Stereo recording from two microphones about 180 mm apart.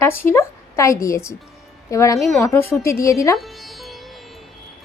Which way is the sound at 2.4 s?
10° left (ahead or behind).